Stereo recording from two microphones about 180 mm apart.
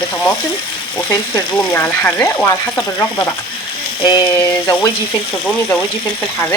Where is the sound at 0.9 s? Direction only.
10° left (ahead or behind).